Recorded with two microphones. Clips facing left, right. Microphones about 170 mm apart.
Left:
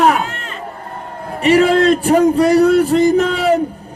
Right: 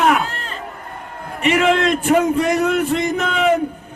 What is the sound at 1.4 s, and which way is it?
A man's voice, 35° left (ahead or behind).